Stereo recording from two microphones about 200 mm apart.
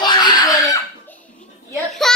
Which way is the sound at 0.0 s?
20° left (ahead or behind).